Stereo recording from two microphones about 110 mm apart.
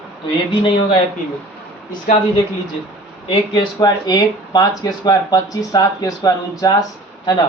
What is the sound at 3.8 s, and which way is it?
Speech, 35° left (ahead or behind).